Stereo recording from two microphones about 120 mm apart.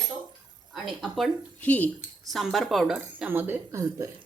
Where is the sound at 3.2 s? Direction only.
15° right (ahead or behind).